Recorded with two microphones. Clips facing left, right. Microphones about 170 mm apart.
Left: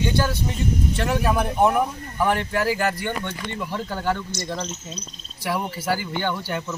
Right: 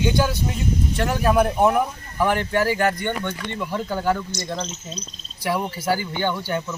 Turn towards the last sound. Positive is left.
turn(degrees=0)  # may be behind; listen again after turning